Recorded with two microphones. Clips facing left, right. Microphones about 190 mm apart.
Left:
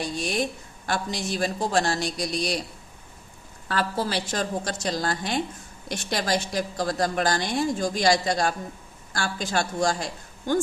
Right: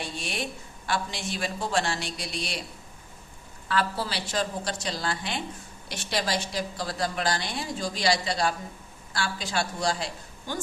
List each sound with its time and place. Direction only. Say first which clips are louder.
0.0 s a man's voice: left 6 dB; 40° left (ahead or behind)
3.7 s a woman's voice: left 2 dB; 45° left (ahead or behind)